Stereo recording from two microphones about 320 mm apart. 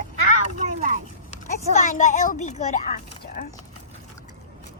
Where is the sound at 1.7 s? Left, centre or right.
Left.